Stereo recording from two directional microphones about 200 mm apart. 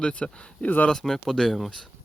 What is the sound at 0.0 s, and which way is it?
Speech, 5° left (ahead or behind).